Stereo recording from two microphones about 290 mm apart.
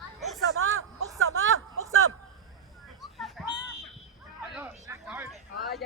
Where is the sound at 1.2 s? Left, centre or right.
Right.